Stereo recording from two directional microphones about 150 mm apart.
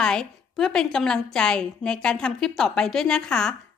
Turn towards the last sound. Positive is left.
turn(degrees=5)  # may be behind; listen again after turning